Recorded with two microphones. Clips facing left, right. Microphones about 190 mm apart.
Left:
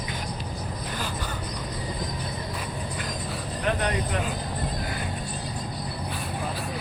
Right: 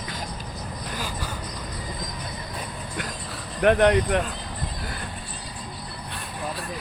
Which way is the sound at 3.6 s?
65° right (ahead or behind).